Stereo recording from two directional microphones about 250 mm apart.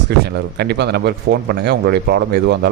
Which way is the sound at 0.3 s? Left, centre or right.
Right.